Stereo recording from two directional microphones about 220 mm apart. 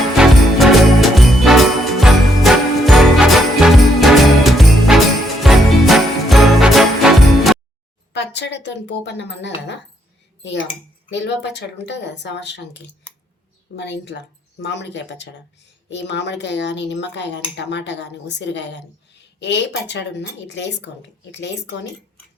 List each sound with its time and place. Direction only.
0.2 s jingle bell: centre (ahead or behind)
8.1 s a woman's voice: 50° left (ahead or behind)
11.1 s speech: 50° left (ahead or behind)
13.7 s speech: 50° left (ahead or behind)